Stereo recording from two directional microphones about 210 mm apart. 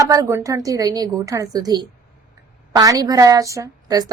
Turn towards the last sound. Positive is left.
turn(degrees=-15)  # may be behind; listen again after turning